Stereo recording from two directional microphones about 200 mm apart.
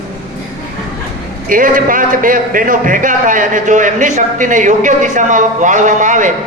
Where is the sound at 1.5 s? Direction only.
45° right (ahead or behind).